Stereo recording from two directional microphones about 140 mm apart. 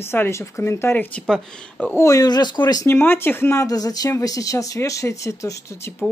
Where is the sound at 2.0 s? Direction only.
25° left (ahead or behind).